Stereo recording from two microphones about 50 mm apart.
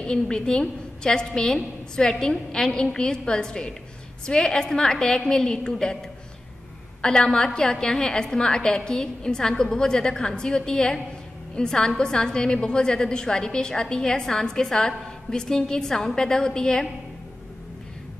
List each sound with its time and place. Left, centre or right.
0.0 s a woman's voice: centre
7.0 s a woman's voice: centre